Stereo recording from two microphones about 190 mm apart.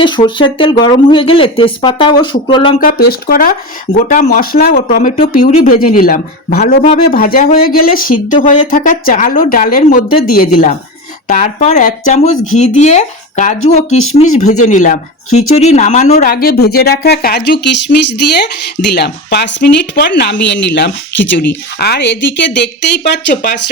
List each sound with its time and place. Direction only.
0.0 s speech: 25° left (ahead or behind)
2.8 s speech: 50° left (ahead or behind)
4.9 s speech: 45° left (ahead or behind)
15.3 s speech: 90° left
15.5 s speech: 35° left (ahead or behind)
16.3 s speech: 50° left (ahead or behind)